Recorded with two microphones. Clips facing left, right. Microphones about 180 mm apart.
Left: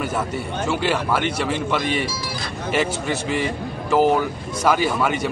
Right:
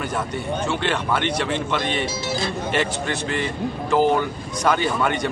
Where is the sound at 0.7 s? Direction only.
5° left (ahead or behind).